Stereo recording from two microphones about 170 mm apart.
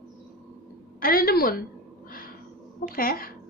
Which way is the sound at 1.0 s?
60° left (ahead or behind).